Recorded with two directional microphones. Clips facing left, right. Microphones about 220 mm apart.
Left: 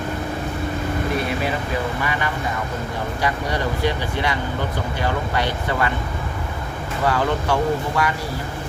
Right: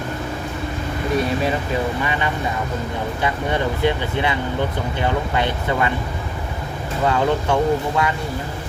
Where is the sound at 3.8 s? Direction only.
20° right (ahead or behind).